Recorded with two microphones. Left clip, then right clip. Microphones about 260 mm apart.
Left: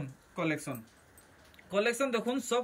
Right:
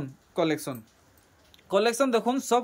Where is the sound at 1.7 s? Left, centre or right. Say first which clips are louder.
Right 7 dB; centre.